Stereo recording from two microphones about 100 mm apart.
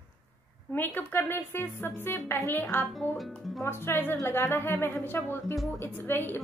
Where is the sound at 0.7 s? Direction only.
20° left (ahead or behind).